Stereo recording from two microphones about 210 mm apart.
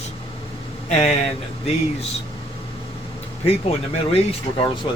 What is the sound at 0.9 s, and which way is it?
Speech, 30° left (ahead or behind).